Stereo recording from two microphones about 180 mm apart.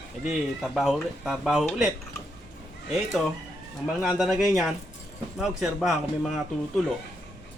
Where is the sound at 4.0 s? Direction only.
Centre (ahead or behind).